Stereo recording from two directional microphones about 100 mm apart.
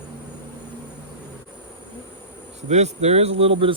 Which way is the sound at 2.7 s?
90° right.